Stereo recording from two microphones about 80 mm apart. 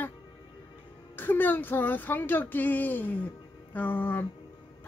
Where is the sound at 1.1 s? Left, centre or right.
Left.